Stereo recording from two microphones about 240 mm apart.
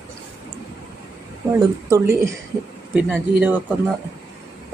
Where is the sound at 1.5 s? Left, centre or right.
Centre.